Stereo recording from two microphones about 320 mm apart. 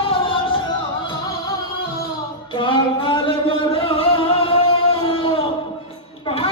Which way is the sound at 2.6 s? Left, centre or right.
Centre.